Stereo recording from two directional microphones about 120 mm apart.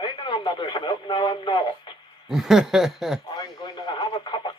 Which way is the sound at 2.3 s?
5° right (ahead or behind).